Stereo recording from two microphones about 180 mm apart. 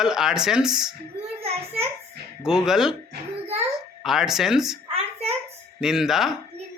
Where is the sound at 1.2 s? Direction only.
35° right (ahead or behind).